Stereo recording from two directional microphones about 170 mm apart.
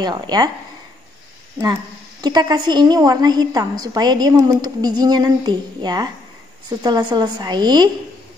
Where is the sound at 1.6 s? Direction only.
25° right (ahead or behind).